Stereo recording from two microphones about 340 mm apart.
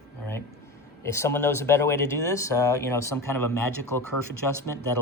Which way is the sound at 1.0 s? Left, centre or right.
Centre.